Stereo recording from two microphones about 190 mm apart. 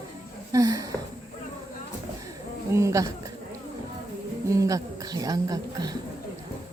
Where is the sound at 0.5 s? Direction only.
20° right (ahead or behind).